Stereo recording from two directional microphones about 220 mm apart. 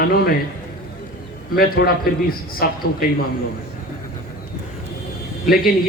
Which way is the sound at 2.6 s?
40° left (ahead or behind).